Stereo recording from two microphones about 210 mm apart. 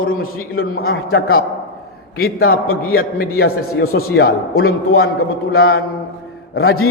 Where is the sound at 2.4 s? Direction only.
45° left (ahead or behind).